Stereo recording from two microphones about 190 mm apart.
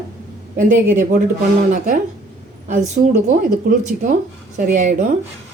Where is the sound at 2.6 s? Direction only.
40° right (ahead or behind).